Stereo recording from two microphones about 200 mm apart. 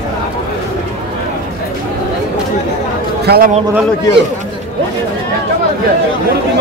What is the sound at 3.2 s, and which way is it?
Speech, 50° right (ahead or behind).